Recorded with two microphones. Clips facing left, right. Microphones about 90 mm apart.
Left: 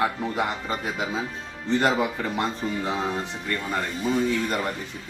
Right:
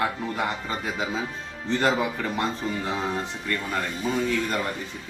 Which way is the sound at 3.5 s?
15° left (ahead or behind).